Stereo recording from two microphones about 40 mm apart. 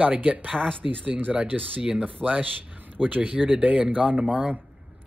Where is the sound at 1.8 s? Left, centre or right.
Centre.